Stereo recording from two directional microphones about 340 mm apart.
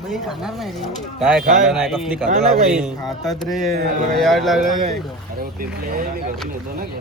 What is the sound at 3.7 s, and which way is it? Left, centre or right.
Speech, right.